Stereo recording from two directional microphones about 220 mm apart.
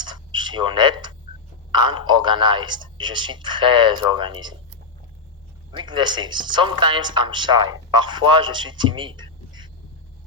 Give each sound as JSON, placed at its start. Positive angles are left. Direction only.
{"t": 0.0, "sound": "a sound", "side_deg": -20}
{"t": 1.7, "sound": "a man's voice", "side_deg": -20}
{"t": 5.7, "sound": "a man's voice", "side_deg": -20}